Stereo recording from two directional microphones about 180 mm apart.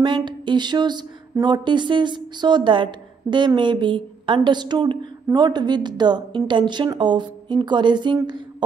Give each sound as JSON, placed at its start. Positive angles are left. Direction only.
{"t": 0.0, "sound": "speech", "side_deg": -25}